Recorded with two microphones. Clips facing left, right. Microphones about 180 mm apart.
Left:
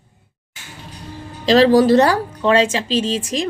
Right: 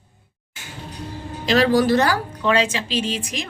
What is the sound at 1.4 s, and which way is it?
Speech, 35° left (ahead or behind).